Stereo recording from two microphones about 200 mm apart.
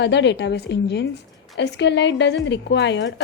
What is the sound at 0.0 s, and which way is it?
A woman's voice, 60° left (ahead or behind).